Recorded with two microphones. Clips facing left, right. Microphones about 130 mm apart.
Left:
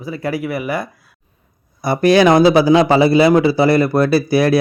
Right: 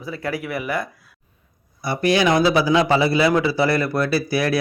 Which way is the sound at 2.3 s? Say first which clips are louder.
Left 6 dB; 25° left (ahead or behind).